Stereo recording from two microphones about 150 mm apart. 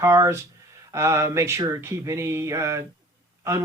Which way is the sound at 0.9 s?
20° right (ahead or behind).